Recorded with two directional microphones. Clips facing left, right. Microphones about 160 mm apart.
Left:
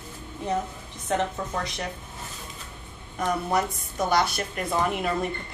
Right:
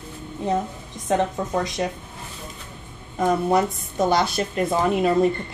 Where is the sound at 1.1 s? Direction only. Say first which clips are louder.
Right 5 dB; 20° right (ahead or behind).